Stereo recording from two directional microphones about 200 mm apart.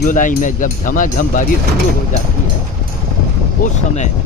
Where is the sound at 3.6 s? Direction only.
45° left (ahead or behind).